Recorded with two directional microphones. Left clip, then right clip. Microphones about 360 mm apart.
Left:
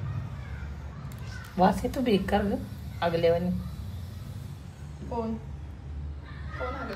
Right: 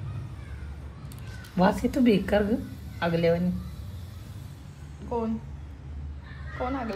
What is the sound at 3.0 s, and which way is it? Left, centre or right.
Speech, right.